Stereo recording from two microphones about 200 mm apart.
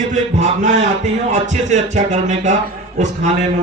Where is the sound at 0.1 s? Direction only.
40° right (ahead or behind).